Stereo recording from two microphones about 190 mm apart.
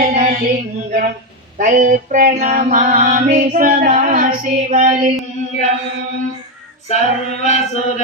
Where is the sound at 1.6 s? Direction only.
45° right (ahead or behind).